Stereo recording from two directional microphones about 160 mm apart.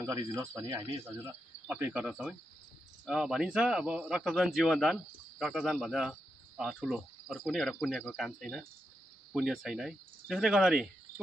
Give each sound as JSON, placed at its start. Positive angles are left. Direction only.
{"t": 0.0, "sound": "speech", "side_deg": -20}